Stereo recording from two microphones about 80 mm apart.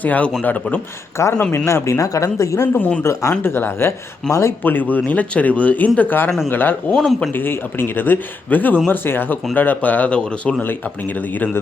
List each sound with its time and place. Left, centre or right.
0.0 s speech: centre
1.2 s speech: left
2.7 s speech: left
3.0 s speech: left
4.6 s speech: left
6.9 s speech: centre
7.2 s speech: left